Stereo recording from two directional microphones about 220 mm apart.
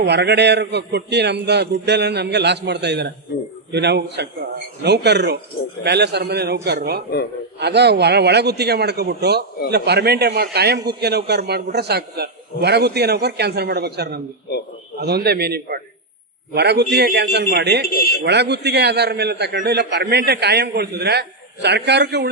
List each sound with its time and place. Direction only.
0.0 s a man's voice: 50° right (ahead or behind)